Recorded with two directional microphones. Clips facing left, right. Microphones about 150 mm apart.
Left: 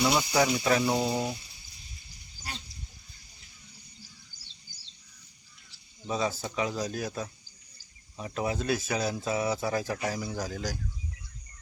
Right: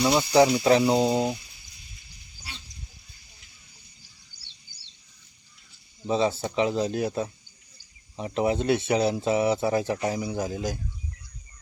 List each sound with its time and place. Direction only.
0.0 s speech: 15° right (ahead or behind)
2.4 s goat: 45° left (ahead or behind)
4.7 s bird: 45° left (ahead or behind)
6.1 s speech: 25° right (ahead or behind)